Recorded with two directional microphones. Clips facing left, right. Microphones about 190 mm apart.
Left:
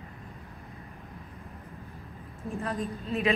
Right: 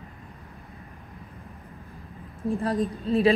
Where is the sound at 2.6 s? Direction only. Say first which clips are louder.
Right 5 dB; 35° right (ahead or behind).